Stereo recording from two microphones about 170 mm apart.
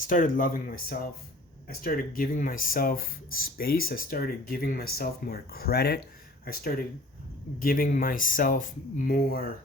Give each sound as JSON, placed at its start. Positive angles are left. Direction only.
{"t": 0.1, "sound": "speech", "side_deg": 50}